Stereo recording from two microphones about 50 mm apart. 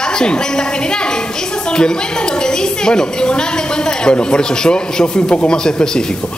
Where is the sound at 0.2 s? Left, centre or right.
Centre.